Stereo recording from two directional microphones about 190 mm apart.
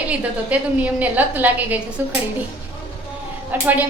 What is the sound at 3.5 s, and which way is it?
Speech, 10° right (ahead or behind).